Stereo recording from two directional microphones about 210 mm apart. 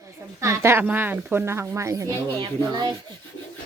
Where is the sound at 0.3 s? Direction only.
15° right (ahead or behind).